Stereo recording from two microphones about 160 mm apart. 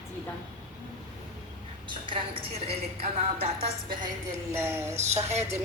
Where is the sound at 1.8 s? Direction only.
30° right (ahead or behind).